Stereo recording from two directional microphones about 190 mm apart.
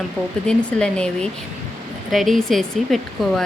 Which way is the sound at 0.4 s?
5° left (ahead or behind).